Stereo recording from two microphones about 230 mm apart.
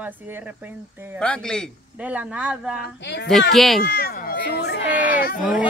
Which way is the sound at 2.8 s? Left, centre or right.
Left.